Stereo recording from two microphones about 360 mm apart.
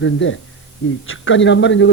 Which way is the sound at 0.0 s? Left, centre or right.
Left.